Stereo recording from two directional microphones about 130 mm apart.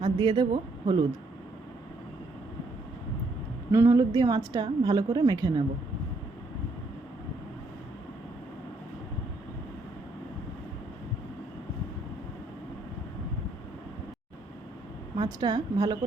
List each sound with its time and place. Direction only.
0.0 s speech: 35° right (ahead or behind)
3.7 s a woman's voice: 20° right (ahead or behind)
15.1 s a woman's voice: 35° right (ahead or behind)